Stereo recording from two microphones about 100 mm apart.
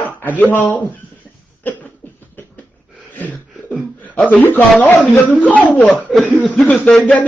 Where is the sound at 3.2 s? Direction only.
15° left (ahead or behind).